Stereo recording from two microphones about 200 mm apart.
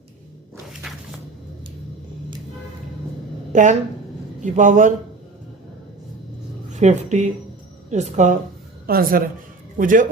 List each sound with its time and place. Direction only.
0.7 s walk: centre (ahead or behind)
3.5 s a man's voice: 40° right (ahead or behind)
6.7 s a man's voice: 35° right (ahead or behind)
8.9 s a man's voice: 45° right (ahead or behind)